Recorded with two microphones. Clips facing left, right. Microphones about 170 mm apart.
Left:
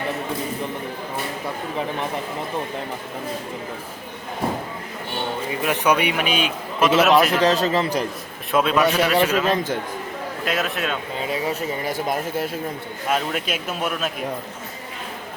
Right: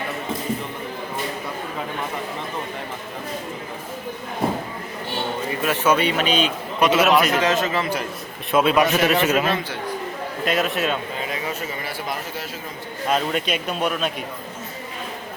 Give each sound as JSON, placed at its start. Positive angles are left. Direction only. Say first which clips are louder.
{"t": 5.5, "sound": "a man's voice", "louder": "even", "side_deg": 15}
{"t": 7.4, "sound": "a man's voice", "louder": "left 2 dB", "side_deg": 35}
{"t": 8.5, "sound": "a man's voice", "louder": "right 1 dB", "side_deg": -5}
{"t": 10.4, "sound": "speech", "louder": "right 3 dB", "side_deg": 0}
{"t": 11.9, "sound": "speech", "louder": "left 5 dB", "side_deg": 45}
{"t": 13.1, "sound": "speech", "louder": "right 2 dB", "side_deg": 5}